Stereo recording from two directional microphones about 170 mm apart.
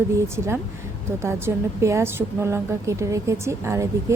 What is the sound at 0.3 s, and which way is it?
A woman's voice, 15° right (ahead or behind).